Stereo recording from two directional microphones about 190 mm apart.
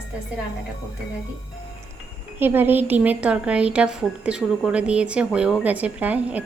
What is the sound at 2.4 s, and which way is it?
Speech, 10° right (ahead or behind).